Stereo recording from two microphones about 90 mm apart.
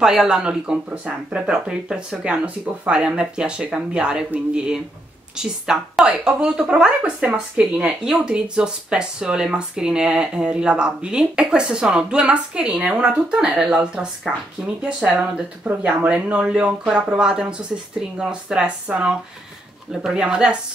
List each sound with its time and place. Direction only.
0.0 s speech: 5° right (ahead or behind)